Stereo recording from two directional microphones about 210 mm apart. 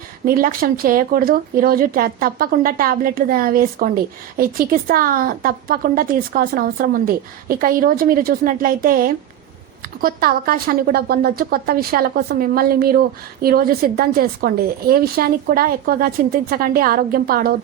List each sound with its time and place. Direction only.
0.3 s speech: 45° right (ahead or behind)